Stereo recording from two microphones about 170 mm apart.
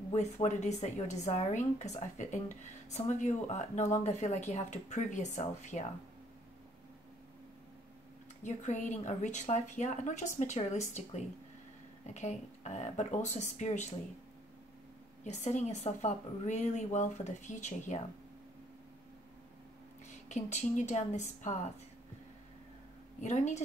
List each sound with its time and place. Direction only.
0.1 s speech: 45° left (ahead or behind)
8.5 s speech: 45° left (ahead or behind)
15.2 s speech: 40° left (ahead or behind)
20.2 s speech: 45° left (ahead or behind)
23.2 s speech: 45° left (ahead or behind)